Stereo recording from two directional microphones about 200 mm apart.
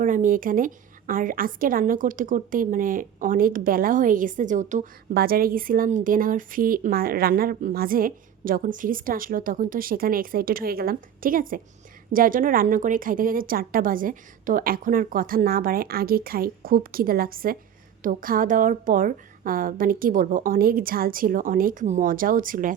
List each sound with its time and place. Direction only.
0.0 s a woman's voice: 40° right (ahead or behind)